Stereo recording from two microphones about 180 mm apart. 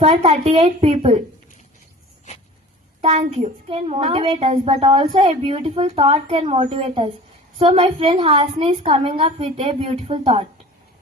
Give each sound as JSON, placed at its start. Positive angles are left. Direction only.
{"t": 0.0, "sound": "a woman's voice", "side_deg": -35}
{"t": 3.0, "sound": "a woman's voice", "side_deg": -35}